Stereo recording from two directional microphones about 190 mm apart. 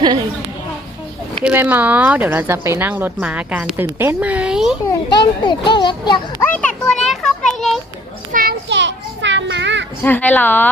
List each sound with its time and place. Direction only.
1.5 s speech: 10° right (ahead or behind)
4.9 s a child's voice: 25° left (ahead or behind)
6.4 s children playing: 10° left (ahead or behind)
8.3 s children playing: 45° right (ahead or behind)
8.7 s children playing: 70° right (ahead or behind)
10.0 s speech: 10° left (ahead or behind)